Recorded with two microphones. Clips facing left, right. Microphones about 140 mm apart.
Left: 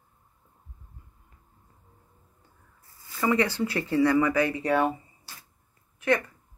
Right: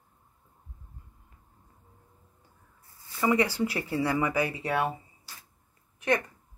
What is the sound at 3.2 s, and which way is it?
Speech, 10° right (ahead or behind).